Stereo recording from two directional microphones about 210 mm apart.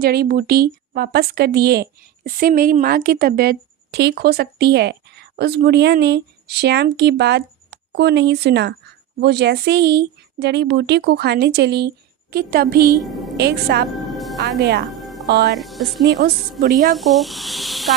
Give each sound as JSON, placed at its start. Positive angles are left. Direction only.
{"t": 0.0, "sound": "speech", "side_deg": -45}
{"t": 13.0, "sound": "a woman's voice", "side_deg": 0}
{"t": 13.3, "sound": "speech", "side_deg": -50}
{"t": 13.9, "sound": "music", "side_deg": 0}
{"t": 14.6, "sound": "speech", "side_deg": -50}
{"t": 14.8, "sound": "music", "side_deg": 0}
{"t": 15.3, "sound": "speech", "side_deg": -55}
{"t": 15.5, "sound": "speech", "side_deg": 0}
{"t": 16.0, "sound": "speech", "side_deg": -50}
{"t": 17.0, "sound": "speech", "side_deg": 0}